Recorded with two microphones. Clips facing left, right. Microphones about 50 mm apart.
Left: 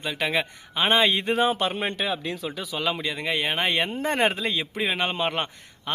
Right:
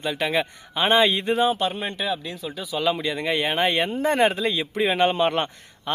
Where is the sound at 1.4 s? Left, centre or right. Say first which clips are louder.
Right 2 dB; left.